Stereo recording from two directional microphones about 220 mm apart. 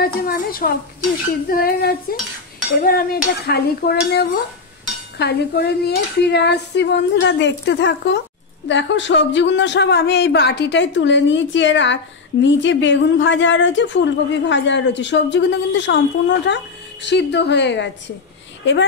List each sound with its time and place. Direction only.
0.0 s a man's voice: 40° left (ahead or behind)